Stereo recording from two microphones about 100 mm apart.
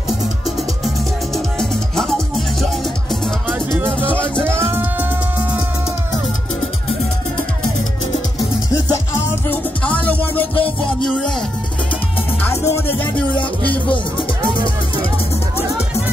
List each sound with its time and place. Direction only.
1.3 s music: 5° left (ahead or behind)
3.5 s music: 20° right (ahead or behind)
9.5 s music: 15° left (ahead or behind)
12.4 s music: 25° left (ahead or behind)